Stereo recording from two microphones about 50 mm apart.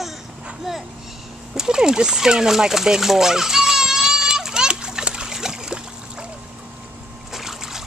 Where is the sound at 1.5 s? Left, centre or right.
Centre.